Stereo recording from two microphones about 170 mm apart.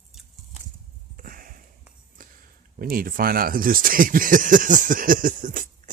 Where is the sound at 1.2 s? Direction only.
55° right (ahead or behind).